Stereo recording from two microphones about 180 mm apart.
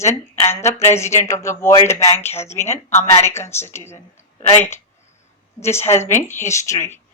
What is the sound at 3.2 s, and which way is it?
Speech, 15° left (ahead or behind).